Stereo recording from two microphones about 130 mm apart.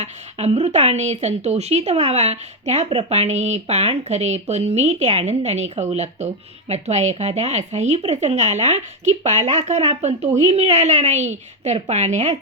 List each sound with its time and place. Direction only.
0.0 s speech: 55° right (ahead or behind)